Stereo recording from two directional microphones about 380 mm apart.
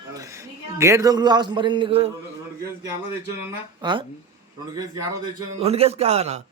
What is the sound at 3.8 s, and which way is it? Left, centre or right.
Speech, centre.